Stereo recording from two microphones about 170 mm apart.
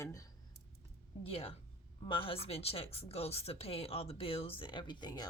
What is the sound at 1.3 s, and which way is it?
A woman's voice, 35° left (ahead or behind).